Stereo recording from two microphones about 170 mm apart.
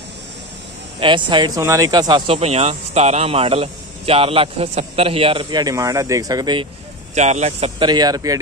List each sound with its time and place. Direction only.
0.9 s speech: 30° right (ahead or behind)
7.2 s speech: 40° right (ahead or behind)
7.8 s speech: 25° right (ahead or behind)